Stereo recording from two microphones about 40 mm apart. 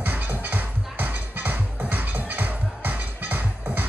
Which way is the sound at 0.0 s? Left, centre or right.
Right.